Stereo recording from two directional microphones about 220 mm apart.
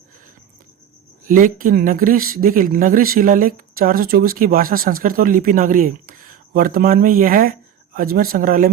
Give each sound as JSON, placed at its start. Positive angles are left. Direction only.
{"t": 1.3, "sound": "speech", "side_deg": -40}